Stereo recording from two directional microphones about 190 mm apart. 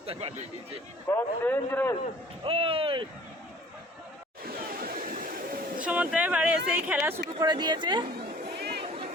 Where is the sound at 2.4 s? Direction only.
30° right (ahead or behind).